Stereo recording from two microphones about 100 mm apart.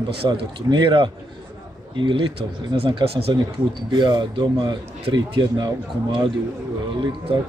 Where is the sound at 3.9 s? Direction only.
45° right (ahead or behind).